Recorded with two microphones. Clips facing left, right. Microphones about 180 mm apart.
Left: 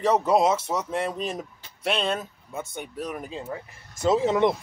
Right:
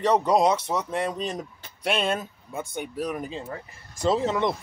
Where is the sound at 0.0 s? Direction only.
5° left (ahead or behind).